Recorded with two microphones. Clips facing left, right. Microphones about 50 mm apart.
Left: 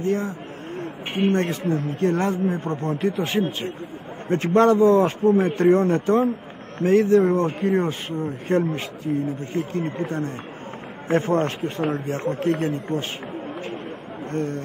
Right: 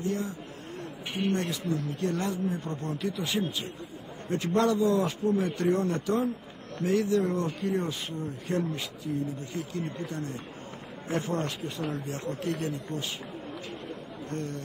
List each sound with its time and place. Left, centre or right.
0.0 s speech: left
14.3 s speech: left